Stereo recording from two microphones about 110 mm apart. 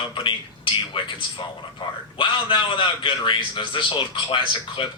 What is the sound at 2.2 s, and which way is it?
A man's voice, 45° left (ahead or behind).